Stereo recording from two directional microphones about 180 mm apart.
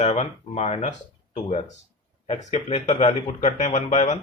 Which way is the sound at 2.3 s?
40° left (ahead or behind).